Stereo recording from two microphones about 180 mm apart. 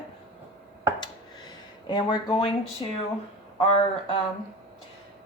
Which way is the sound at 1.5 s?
25° left (ahead or behind).